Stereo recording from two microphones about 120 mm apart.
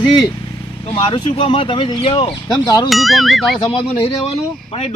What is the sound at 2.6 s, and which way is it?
Speech, 30° left (ahead or behind).